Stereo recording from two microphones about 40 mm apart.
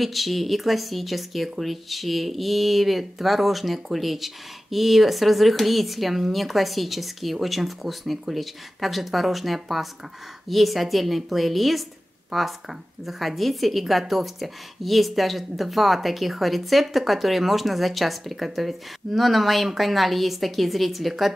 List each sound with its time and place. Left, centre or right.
0.0 s a woman's voice: centre